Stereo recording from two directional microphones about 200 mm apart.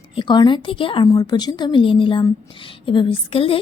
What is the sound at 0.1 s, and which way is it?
A woman's voice, 25° left (ahead or behind).